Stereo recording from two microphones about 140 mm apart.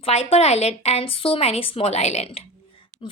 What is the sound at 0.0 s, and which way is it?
A woman's voice, 45° left (ahead or behind).